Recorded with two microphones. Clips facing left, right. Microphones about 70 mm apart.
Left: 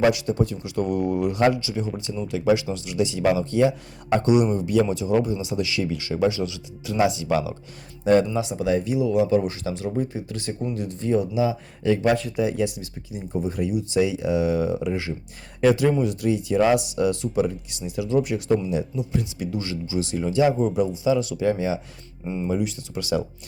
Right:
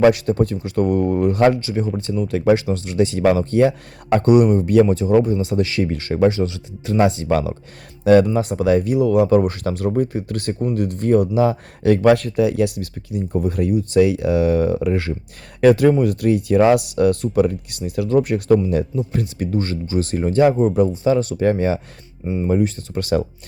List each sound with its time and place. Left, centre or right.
0.0 s speech: right
8.0 s speech: right
8.3 s speech: right
8.5 s speech: right